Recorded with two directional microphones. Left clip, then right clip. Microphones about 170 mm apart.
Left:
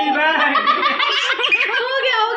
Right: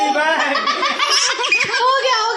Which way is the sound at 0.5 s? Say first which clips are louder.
Left 2 dB; 90° right.